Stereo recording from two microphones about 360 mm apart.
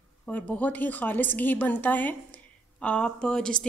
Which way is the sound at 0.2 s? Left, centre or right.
Centre.